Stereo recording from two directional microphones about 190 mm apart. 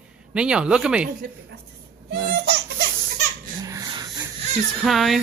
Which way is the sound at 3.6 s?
20° right (ahead or behind).